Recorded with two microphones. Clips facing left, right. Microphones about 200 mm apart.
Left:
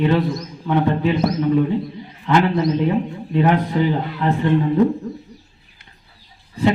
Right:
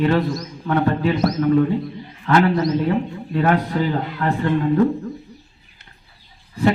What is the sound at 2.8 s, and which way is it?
A man's voice, 15° left (ahead or behind).